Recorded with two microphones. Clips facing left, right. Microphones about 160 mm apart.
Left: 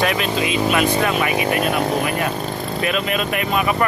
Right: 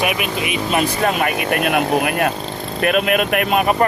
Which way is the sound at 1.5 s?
70° right (ahead or behind).